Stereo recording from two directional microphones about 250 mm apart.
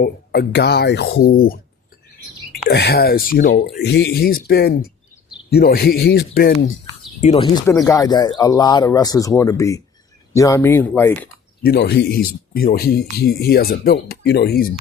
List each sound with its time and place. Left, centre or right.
0.0 s speech: left
2.6 s speech: left
7.2 s speech: left
7.4 s speech: centre
11.6 s speech: left